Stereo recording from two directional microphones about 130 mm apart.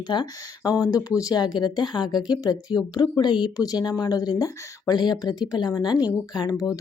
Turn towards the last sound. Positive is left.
turn(degrees=30)  # may be behind; listen again after turning